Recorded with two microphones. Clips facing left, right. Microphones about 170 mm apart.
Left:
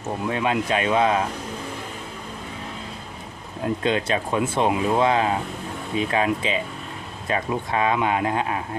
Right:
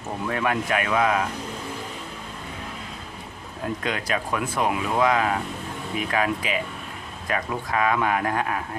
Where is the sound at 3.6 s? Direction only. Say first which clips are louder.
Left 5 dB; 25° left (ahead or behind).